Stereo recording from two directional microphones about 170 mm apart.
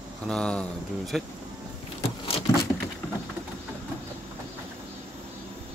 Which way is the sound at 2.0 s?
35° left (ahead or behind).